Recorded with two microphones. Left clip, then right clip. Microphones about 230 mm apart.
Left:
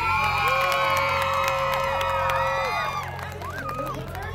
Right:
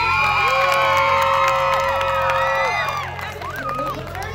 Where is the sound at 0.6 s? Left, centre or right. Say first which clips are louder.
Right 6 dB; left.